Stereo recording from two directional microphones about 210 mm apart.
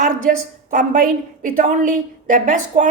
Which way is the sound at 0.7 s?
40° right (ahead or behind).